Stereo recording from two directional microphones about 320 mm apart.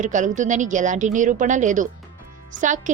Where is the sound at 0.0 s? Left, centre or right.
Right.